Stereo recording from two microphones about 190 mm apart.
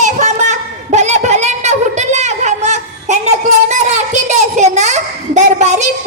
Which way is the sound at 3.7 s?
40° right (ahead or behind).